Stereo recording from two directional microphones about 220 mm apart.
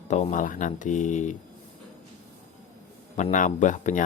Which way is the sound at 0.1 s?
35° left (ahead or behind).